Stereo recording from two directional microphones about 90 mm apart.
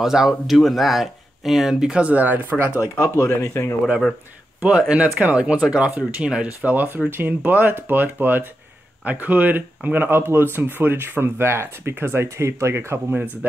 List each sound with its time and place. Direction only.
0.0 s speech: 5° right (ahead or behind)
2.7 s speech: 30° left (ahead or behind)
4.6 s speech: 15° right (ahead or behind)